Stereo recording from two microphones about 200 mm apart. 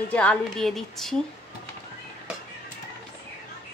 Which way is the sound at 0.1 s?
5° left (ahead or behind).